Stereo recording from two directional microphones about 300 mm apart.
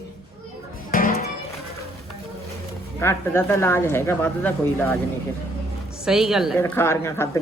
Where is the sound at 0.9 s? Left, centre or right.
Left.